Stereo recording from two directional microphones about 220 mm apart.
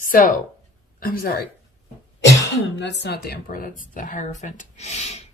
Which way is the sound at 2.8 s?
50° left (ahead or behind).